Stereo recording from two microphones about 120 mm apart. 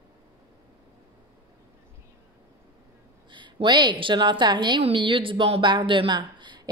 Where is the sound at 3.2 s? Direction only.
40° right (ahead or behind).